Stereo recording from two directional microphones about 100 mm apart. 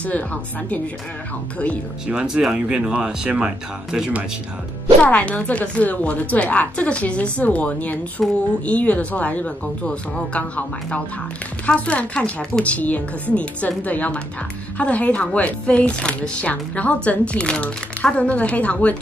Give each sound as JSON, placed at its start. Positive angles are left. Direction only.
{"t": 0.0, "sound": "speech", "side_deg": 15}
{"t": 2.0, "sound": "speech", "side_deg": -10}
{"t": 5.0, "sound": "speech", "side_deg": 15}
{"t": 8.2, "sound": "a sound", "side_deg": 0}
{"t": 8.6, "sound": "speech", "side_deg": 15}